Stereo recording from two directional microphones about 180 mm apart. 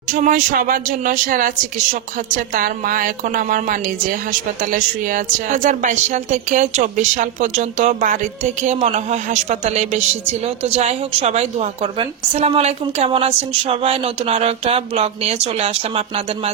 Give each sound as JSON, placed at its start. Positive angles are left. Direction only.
{"t": 0.1, "sound": "a woman's voice", "side_deg": -45}